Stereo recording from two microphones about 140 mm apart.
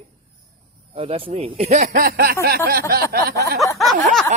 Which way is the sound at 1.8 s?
90° right.